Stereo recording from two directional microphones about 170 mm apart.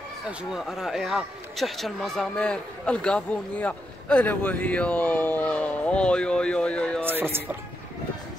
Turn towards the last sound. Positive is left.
turn(degrees=-10)  # may be behind; listen again after turning